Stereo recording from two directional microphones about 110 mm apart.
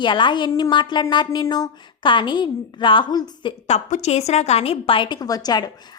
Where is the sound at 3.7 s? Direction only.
90° left; by 5.6 s 35° left (ahead or behind).